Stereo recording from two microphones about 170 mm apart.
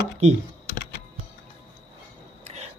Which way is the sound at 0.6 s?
75° left (ahead or behind).